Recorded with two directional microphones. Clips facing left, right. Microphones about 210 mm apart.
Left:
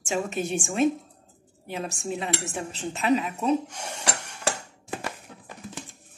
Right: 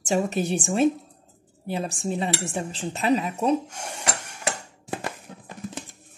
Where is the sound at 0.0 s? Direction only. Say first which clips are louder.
Right 4 dB; 35° right (ahead or behind).